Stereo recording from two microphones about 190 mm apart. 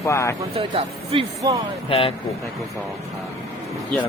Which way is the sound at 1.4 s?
20° right (ahead or behind).